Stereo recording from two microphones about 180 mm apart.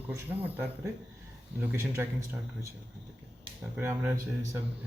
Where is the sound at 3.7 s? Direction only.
10° right (ahead or behind).